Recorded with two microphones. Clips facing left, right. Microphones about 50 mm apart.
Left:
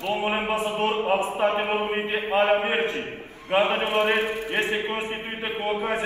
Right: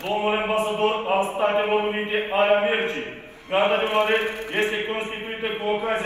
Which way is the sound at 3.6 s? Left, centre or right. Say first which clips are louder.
Right 2 dB; right.